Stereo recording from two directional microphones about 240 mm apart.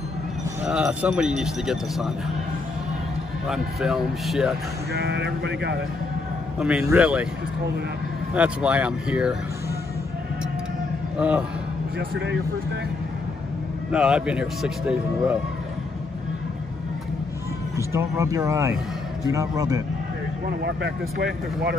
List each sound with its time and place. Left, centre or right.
0.7 s speech: centre
3.4 s speech: centre
4.9 s speech: right
6.6 s speech: centre
8.4 s speech: centre
11.1 s speech: centre
13.9 s speech: centre
17.9 s speech: centre
20.4 s speech: right